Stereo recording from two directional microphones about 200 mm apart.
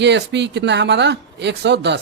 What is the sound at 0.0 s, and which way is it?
Speech, 60° right (ahead or behind).